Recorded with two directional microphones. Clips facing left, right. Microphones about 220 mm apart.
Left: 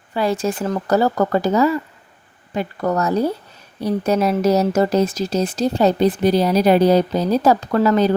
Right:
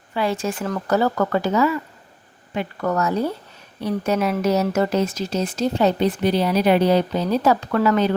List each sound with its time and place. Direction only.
0.1 s speech: 40° left (ahead or behind)